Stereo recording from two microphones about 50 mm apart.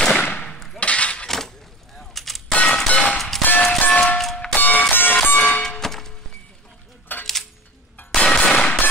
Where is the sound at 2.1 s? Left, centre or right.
Centre.